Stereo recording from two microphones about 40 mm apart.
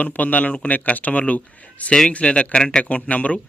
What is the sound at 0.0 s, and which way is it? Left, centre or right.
Speech, left.